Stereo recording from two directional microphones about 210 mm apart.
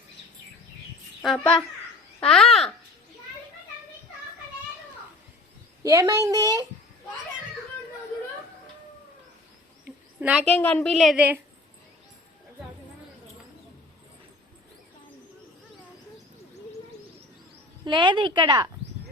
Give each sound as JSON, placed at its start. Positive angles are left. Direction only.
{"t": 1.2, "sound": "a woman's voice", "side_deg": 0}
{"t": 5.8, "sound": "a woman's voice", "side_deg": -15}
{"t": 9.8, "sound": "a sound", "side_deg": -5}
{"t": 10.4, "sound": "a woman's voice", "side_deg": 10}
{"t": 17.8, "sound": "speech", "side_deg": -20}